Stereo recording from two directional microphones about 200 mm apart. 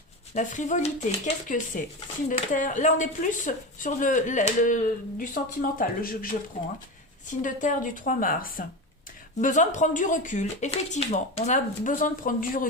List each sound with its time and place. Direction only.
0.3 s a woman's voice: 35° left (ahead or behind)
7.4 s a woman's voice: 40° left (ahead or behind)